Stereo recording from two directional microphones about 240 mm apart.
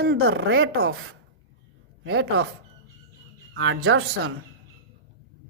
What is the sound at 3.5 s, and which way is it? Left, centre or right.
Speech, right.